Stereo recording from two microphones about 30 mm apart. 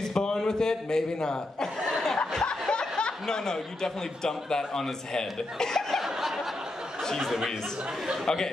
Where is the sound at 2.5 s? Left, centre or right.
Left.